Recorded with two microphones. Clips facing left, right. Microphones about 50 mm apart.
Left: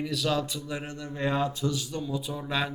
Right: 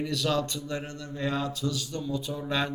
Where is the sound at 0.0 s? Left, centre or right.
Centre.